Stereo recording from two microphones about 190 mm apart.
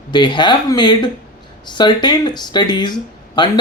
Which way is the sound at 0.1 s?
25° left (ahead or behind).